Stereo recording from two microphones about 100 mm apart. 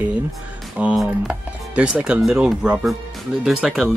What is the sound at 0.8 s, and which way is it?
Speech, 10° right (ahead or behind).